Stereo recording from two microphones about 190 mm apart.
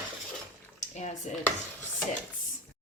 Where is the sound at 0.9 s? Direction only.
35° left (ahead or behind).